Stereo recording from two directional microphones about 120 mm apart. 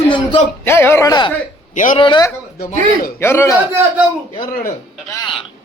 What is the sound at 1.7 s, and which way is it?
Speech, 90° left.